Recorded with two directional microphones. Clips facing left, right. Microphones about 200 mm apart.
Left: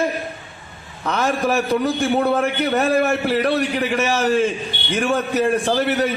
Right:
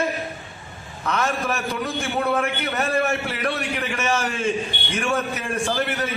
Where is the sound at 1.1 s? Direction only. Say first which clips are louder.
Left 4 dB; 35° left (ahead or behind).